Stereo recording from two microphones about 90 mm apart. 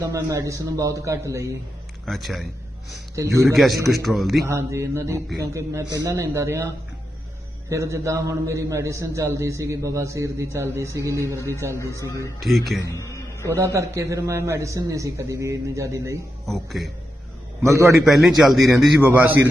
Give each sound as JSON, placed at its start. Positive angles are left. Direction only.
{"t": 0.0, "sound": "a man's voice", "side_deg": -35}
{"t": 2.0, "sound": "a man's voice", "side_deg": 0}
{"t": 3.2, "sound": "a man's voice", "side_deg": -35}
{"t": 3.4, "sound": "a man's voice", "side_deg": 0}
{"t": 4.4, "sound": "a man's voice", "side_deg": -30}
{"t": 7.7, "sound": "a man's voice", "side_deg": -35}
{"t": 11.9, "sound": "a man's voice", "side_deg": 35}
{"t": 12.4, "sound": "a man's voice", "side_deg": 0}
{"t": 12.8, "sound": "music", "side_deg": 35}
{"t": 13.5, "sound": "a man's voice", "side_deg": -30}
{"t": 16.5, "sound": "a man's voice", "side_deg": 0}
{"t": 17.6, "sound": "a man's voice", "side_deg": -35}
{"t": 17.9, "sound": "a man's voice", "side_deg": 0}
{"t": 18.9, "sound": "a man's voice", "side_deg": -25}